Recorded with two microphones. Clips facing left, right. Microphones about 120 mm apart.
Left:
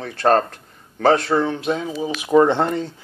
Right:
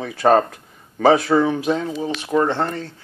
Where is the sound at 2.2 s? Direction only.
15° left (ahead or behind).